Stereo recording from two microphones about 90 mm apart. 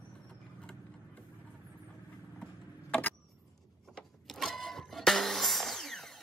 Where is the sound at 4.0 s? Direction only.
5° left (ahead or behind).